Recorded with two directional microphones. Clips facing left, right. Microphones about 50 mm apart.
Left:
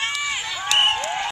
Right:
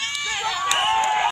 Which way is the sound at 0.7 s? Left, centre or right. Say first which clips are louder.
Even; right.